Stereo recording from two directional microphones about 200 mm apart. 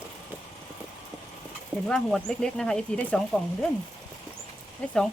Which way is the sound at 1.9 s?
5° left (ahead or behind).